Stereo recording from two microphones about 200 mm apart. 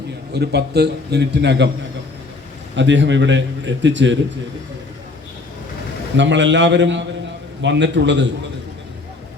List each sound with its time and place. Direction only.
0.3 s a man's voice: 55° right (ahead or behind)
2.7 s a man's voice: 65° right (ahead or behind)
6.1 s a man's voice: 65° right (ahead or behind)